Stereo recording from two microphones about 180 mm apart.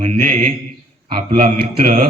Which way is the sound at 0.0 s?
45° right (ahead or behind).